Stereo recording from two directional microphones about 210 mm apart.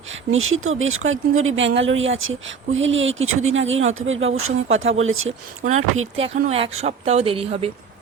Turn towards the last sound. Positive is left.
turn(degrees=-25)  # may be behind; listen again after turning